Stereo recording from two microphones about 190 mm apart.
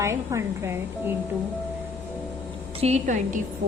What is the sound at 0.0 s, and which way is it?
A woman's voice, 15° right (ahead or behind).